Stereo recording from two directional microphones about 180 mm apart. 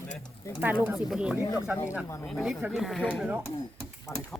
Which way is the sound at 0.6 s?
10° right (ahead or behind).